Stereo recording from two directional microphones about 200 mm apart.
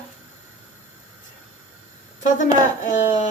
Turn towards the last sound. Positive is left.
turn(degrees=40)  # may be behind; listen again after turning